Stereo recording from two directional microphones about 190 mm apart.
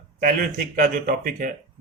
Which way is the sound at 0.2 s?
50° right (ahead or behind).